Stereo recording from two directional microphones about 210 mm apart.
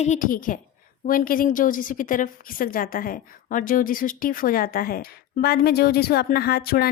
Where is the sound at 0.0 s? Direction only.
35° left (ahead or behind).